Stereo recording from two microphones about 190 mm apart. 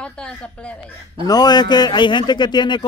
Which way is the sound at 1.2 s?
20° left (ahead or behind).